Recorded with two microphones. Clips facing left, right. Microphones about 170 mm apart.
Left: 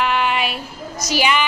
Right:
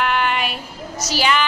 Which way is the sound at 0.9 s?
10° left (ahead or behind).